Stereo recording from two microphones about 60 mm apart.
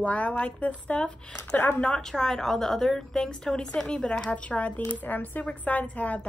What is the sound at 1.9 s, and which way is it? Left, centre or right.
A woman's voice, centre.